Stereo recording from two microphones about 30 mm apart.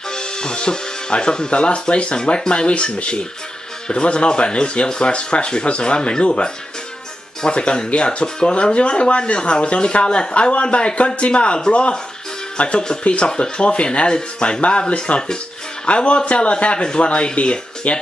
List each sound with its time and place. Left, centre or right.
0.1 s music: left
1.5 s speech: left
17.8 s speech: left